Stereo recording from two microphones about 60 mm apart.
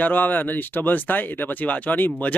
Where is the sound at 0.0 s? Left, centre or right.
Left.